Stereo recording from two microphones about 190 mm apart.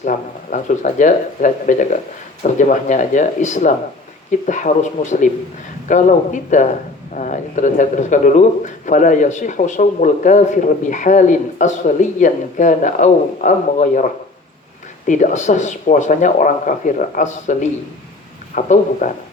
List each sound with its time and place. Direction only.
0.0 s speech: 45° left (ahead or behind)